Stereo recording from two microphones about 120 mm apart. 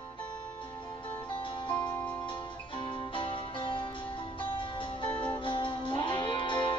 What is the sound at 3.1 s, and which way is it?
Music, 45° left (ahead or behind).